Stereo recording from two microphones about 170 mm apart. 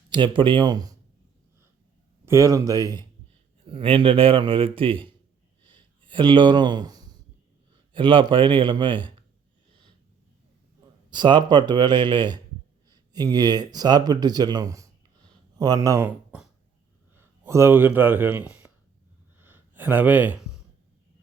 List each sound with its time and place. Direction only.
0.1 s speech: 30° right (ahead or behind)
2.2 s a man's voice: 15° right (ahead or behind)
5.6 s a sound: 30° right (ahead or behind)
7.9 s speech: 30° right (ahead or behind)
11.1 s speech: 25° right (ahead or behind); by 18.7 s 10° right (ahead or behind)
19.4 s a sound: 10° right (ahead or behind)